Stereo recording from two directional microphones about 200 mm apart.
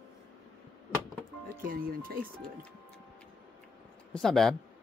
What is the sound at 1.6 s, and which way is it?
Speech, 45° right (ahead or behind).